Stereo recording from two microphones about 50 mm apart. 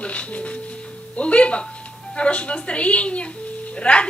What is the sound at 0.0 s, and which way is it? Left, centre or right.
Music, left.